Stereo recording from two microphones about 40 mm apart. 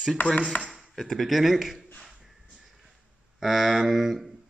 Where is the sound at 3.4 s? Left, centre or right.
Centre.